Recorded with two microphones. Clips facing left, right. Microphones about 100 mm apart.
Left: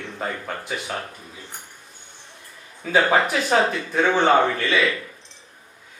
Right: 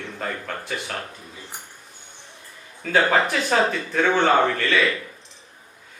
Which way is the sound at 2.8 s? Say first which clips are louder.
Left 1 dB; 10° left (ahead or behind).